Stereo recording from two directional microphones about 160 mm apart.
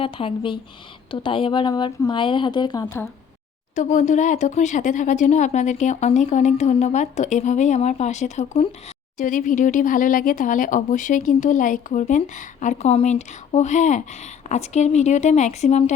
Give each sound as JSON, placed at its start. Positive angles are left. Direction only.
{"t": 0.0, "sound": "speech", "side_deg": 35}
{"t": 2.8, "sound": "speech", "side_deg": 15}
{"t": 3.8, "sound": "speech", "side_deg": 50}